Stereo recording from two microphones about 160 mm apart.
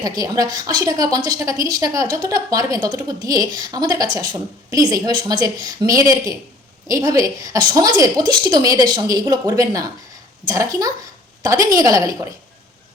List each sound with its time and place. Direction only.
0.0 s a woman's voice: 25° right (ahead or behind)